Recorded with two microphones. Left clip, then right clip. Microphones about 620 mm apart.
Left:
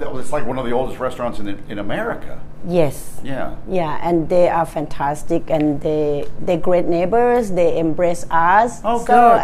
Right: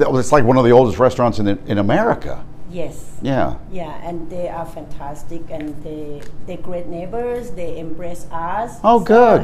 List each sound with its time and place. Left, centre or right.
0.0 s speech: right
3.7 s speech: left
8.8 s speech: right